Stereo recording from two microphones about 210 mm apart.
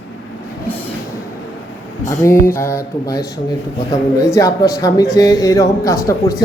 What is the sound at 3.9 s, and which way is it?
A man's voice, 15° left (ahead or behind).